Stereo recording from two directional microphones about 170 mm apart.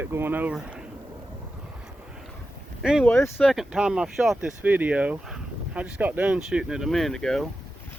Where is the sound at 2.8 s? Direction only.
5° right (ahead or behind).